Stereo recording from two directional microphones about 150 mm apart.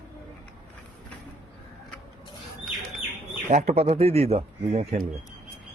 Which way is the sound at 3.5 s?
45° right (ahead or behind).